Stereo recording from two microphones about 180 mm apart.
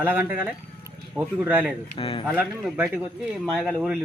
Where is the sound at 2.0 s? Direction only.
30° left (ahead or behind).